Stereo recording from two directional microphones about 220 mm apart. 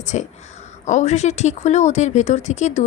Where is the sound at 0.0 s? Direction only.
35° left (ahead or behind).